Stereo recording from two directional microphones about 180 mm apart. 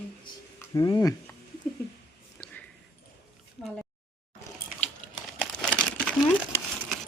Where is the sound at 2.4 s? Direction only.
5° left (ahead or behind).